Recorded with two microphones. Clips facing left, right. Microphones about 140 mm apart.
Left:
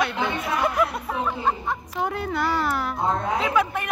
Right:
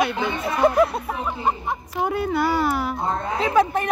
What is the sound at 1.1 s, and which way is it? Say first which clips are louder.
Speech: even; 10° right (ahead or behind).